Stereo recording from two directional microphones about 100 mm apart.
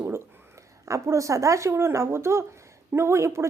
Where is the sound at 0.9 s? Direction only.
30° right (ahead or behind).